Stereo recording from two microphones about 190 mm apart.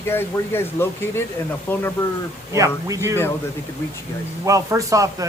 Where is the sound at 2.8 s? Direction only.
15° right (ahead or behind).